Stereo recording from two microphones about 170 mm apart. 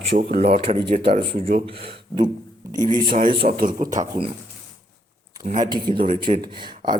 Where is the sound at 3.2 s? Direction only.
30° right (ahead or behind).